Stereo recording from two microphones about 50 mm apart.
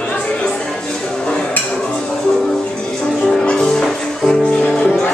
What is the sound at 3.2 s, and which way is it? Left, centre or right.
Music, centre.